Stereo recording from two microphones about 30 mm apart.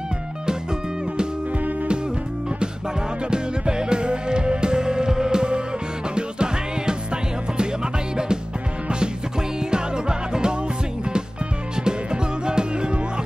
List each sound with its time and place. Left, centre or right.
3.3 s music: right
9.7 s music: right
11.7 s music: right